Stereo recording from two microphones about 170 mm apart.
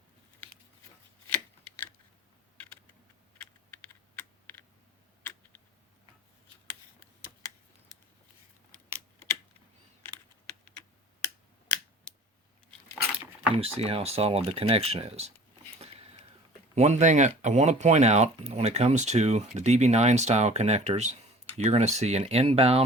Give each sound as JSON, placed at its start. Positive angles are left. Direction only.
{"t": 4.1, "sound": "computer keyboard", "side_deg": 10}
{"t": 5.2, "sound": "a sound", "side_deg": 10}
{"t": 13.6, "sound": "speech", "side_deg": -35}
{"t": 16.7, "sound": "speech", "side_deg": -40}